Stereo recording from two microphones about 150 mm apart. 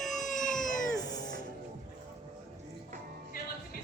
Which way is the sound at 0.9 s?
25° left (ahead or behind).